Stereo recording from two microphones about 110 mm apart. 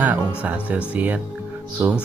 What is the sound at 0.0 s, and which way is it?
Speech, 15° right (ahead or behind).